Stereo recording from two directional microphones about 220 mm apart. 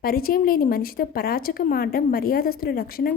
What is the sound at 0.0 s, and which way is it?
A woman's voice, 40° left (ahead or behind).